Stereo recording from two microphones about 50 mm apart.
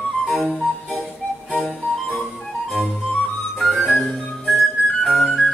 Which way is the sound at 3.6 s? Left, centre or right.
Centre.